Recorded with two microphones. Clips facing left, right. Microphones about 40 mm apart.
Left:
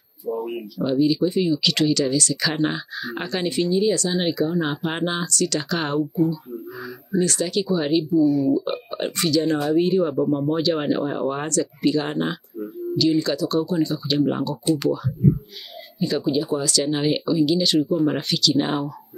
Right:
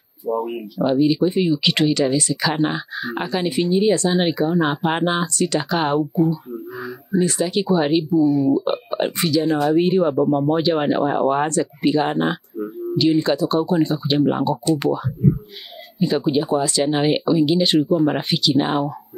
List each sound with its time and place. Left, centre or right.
0.3 s speech: centre
0.7 s speech: right
3.7 s speech: right
6.1 s speech: right
7.1 s speech: centre
9.4 s speech: centre
9.7 s speech: right
16.0 s speech: right